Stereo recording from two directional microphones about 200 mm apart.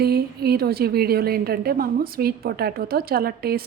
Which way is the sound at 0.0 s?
50° right (ahead or behind).